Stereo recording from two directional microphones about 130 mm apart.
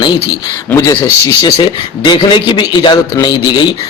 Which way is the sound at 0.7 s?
15° left (ahead or behind).